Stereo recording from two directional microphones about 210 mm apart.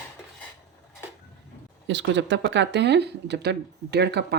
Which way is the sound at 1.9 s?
60° right (ahead or behind).